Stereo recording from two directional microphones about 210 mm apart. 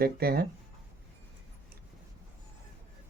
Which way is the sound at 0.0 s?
50° right (ahead or behind).